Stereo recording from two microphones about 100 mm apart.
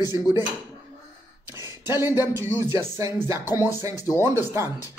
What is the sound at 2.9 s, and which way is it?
Speech, 30° right (ahead or behind).